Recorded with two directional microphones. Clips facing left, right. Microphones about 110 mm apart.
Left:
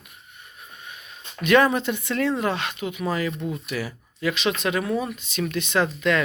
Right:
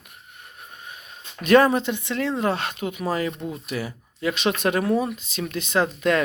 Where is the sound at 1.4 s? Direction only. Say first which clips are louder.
Right 2 dB; 40° right (ahead or behind).